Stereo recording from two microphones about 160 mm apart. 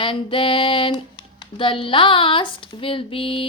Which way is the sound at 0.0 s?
35° left (ahead or behind).